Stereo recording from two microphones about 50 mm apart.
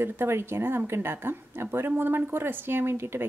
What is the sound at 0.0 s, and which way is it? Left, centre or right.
A woman's voice, right.